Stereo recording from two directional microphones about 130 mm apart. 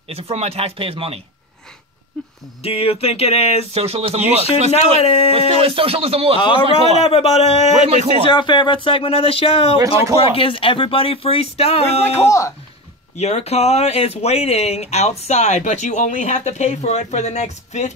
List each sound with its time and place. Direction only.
0.1 s speech: 50° right (ahead or behind)
2.6 s speech: 50° left (ahead or behind)
3.7 s speech: 50° right (ahead or behind)
5.0 s speech: 50° left (ahead or behind)
5.6 s speech: 45° right (ahead or behind)
7.1 s speech: 50° left (ahead or behind)
7.9 s speech: 60° right (ahead or behind)
8.3 s speech: 35° left (ahead or behind); by 12.3 s 55° left (ahead or behind)
12.3 s speech: 25° left (ahead or behind)
13.2 s speech: 55° left (ahead or behind)